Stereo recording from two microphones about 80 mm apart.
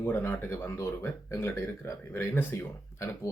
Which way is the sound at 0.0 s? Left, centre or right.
Left.